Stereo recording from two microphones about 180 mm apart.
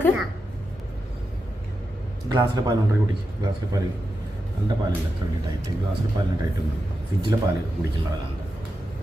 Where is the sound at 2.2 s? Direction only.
20° right (ahead or behind).